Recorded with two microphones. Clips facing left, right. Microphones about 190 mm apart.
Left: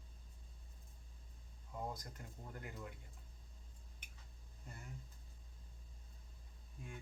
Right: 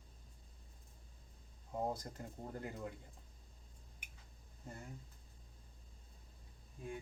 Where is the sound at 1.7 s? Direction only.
35° right (ahead or behind).